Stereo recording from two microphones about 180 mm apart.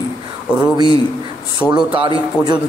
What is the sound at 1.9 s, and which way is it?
Speech, 30° right (ahead or behind).